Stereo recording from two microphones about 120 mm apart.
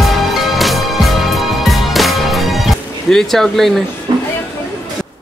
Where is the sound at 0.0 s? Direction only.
Centre (ahead or behind).